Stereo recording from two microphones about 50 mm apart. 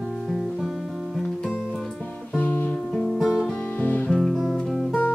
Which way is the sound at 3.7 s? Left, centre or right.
Left.